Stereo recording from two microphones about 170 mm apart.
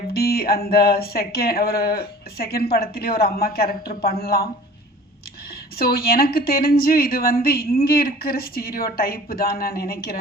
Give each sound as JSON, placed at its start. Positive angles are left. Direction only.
{"t": 0.1, "sound": "speech", "side_deg": 65}
{"t": 5.8, "sound": "speech", "side_deg": 60}